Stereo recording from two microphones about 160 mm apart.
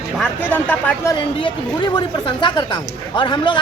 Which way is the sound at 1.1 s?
30° left (ahead or behind).